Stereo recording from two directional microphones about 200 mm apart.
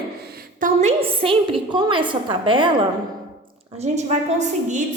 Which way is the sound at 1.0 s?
25° right (ahead or behind).